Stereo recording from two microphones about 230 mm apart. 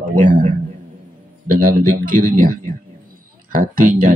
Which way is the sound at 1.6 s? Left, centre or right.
Right.